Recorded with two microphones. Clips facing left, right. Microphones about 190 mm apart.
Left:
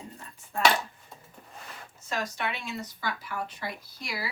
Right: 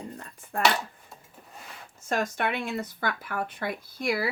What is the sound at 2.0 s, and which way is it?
Speech, 50° right (ahead or behind).